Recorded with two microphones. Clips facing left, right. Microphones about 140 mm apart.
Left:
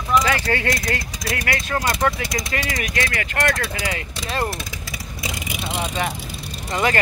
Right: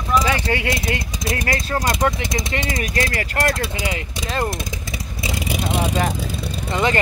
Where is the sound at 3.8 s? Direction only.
15° right (ahead or behind).